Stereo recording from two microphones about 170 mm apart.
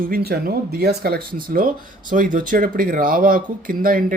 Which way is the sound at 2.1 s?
50° right (ahead or behind).